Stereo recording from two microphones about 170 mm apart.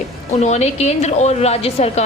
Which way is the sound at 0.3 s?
40° left (ahead or behind).